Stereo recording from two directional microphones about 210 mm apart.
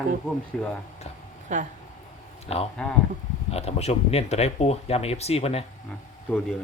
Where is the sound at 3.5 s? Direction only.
30° left (ahead or behind).